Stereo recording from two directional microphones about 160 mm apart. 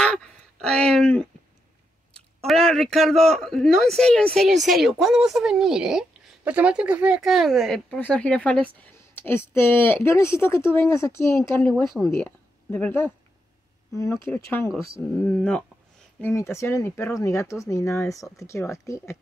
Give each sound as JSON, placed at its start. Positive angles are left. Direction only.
{"t": 0.0, "sound": "speech", "side_deg": 5}
{"t": 2.4, "sound": "a woman's voice", "side_deg": 0}
{"t": 14.3, "sound": "a woman's voice", "side_deg": 10}